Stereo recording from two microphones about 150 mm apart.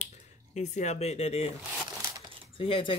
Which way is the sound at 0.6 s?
50° left (ahead or behind).